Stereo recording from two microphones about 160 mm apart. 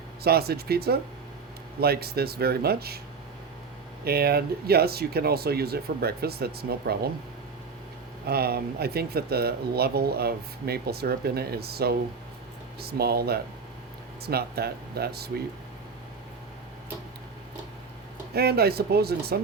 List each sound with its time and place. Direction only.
0.2 s speech: 75° right (ahead or behind)
4.0 s speech: 75° right (ahead or behind)
8.3 s speech: 75° right (ahead or behind)
18.3 s speech: 80° right